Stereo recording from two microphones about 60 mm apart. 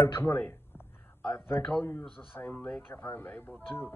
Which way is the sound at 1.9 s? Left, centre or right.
Left.